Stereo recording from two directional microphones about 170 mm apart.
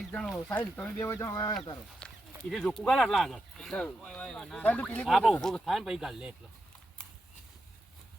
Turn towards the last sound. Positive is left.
turn(degrees=-5)  # may be behind; listen again after turning